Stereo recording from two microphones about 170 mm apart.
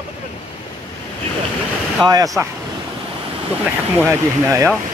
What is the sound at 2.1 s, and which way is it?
Speech, 20° right (ahead or behind).